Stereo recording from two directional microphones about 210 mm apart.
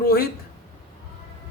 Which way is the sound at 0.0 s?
45° left (ahead or behind).